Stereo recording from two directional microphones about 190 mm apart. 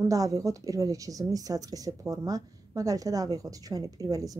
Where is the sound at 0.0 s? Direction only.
20° right (ahead or behind).